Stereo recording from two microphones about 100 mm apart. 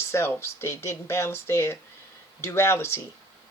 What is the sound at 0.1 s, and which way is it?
Speech, 25° left (ahead or behind).